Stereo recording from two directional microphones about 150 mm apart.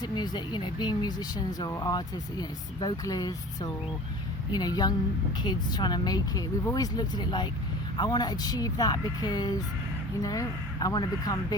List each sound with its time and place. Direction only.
0.0 s speech: 30° left (ahead or behind)